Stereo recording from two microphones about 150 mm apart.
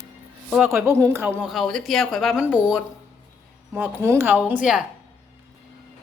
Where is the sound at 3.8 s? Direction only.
15° right (ahead or behind).